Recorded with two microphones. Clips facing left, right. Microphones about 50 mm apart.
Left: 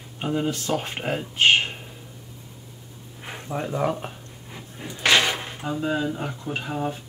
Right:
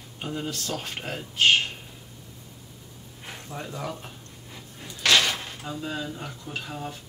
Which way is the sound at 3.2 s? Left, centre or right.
Left.